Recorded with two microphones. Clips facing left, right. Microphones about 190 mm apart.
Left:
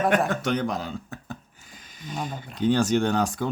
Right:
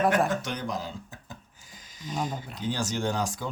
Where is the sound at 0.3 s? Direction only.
60° left (ahead or behind).